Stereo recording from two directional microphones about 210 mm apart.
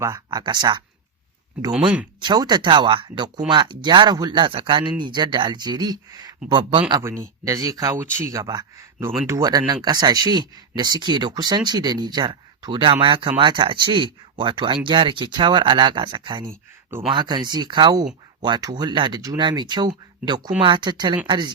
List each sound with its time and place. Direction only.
0.0 s speech: 15° right (ahead or behind)
2.2 s speech: 20° right (ahead or behind)